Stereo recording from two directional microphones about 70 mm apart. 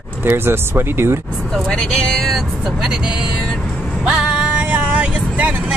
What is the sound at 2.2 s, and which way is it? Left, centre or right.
Speech, centre.